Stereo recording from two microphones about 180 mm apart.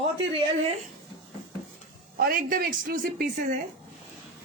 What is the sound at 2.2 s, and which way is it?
A woman's voice, 55° right (ahead or behind).